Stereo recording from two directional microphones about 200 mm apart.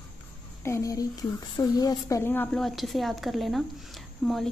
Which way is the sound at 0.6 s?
15° left (ahead or behind).